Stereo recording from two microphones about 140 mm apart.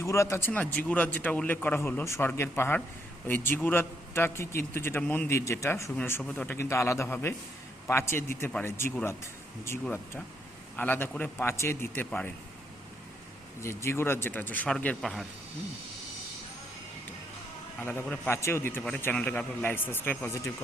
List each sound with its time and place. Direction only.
0.0 s a man's voice: 20° left (ahead or behind)
13.6 s a man's voice: 20° left (ahead or behind); by 15.3 s centre (ahead or behind)
17.8 s a man's voice: 15° left (ahead or behind)